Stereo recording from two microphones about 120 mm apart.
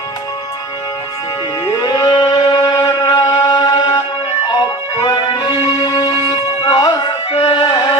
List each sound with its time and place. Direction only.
1.7 s music: 30° left (ahead or behind)
7.3 s music: 50° left (ahead or behind)
7.6 s carnatic music: 35° left (ahead or behind)